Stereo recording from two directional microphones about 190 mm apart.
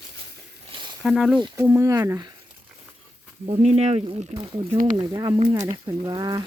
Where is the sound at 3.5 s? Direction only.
35° right (ahead or behind).